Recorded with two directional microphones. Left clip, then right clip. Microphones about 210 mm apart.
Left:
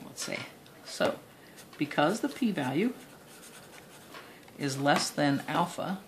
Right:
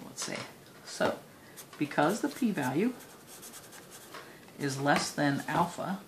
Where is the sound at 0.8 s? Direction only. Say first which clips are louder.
Left 1 dB; 25° left (ahead or behind).